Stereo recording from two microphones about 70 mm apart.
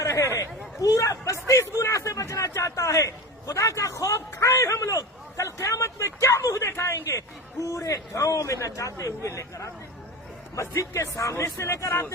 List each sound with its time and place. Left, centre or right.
0.0 s chatter: left
0.8 s hubbub: left
1.8 s a sound: left
6.7 s a man's voice: left